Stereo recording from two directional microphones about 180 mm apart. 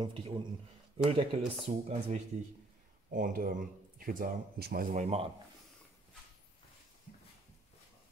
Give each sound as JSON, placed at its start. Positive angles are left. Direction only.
{"t": 0.0, "sound": "speech", "side_deg": -25}
{"t": 3.1, "sound": "speech", "side_deg": -50}
{"t": 4.9, "sound": "speech", "side_deg": -40}